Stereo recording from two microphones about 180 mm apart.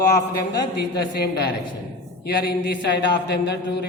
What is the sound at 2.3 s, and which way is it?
Speech, 70° left (ahead or behind).